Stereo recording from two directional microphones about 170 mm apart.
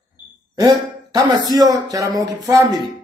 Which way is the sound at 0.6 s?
25° right (ahead or behind).